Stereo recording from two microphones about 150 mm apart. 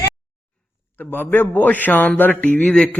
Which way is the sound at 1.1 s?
15° left (ahead or behind).